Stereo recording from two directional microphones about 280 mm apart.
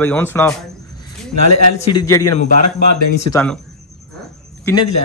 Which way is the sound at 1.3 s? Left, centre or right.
Left.